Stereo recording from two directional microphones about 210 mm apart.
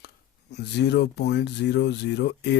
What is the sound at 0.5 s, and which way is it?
Speech, 55° left (ahead or behind).